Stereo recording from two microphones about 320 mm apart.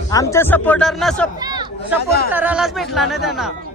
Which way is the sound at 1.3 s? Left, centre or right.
Centre.